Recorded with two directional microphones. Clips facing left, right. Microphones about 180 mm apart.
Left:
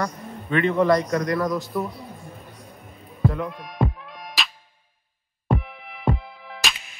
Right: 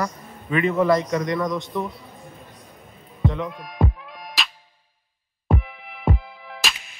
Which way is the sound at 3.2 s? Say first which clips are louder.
Even; centre (ahead or behind).